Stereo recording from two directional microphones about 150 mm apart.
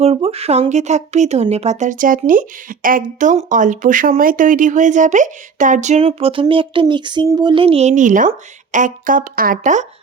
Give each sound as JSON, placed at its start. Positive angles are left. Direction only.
{"t": 0.0, "sound": "speech", "side_deg": -40}